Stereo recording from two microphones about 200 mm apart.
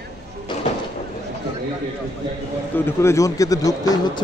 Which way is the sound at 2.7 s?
15° left (ahead or behind).